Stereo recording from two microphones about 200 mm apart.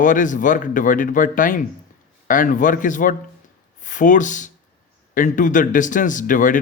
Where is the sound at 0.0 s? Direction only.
40° left (ahead or behind).